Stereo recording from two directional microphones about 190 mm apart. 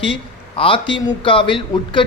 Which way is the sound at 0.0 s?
25° left (ahead or behind).